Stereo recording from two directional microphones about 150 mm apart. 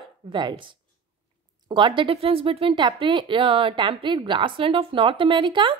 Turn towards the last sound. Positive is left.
turn(degrees=-30)  # may be behind; listen again after turning